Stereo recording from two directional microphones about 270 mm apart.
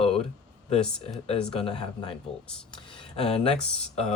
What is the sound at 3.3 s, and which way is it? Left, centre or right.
Speech, left.